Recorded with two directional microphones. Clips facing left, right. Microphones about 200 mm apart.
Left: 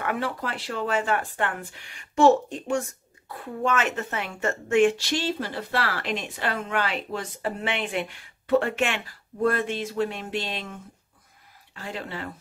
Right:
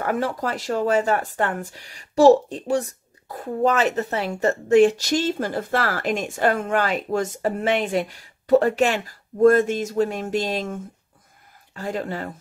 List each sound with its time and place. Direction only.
0.0 s a woman's voice: 40° right (ahead or behind)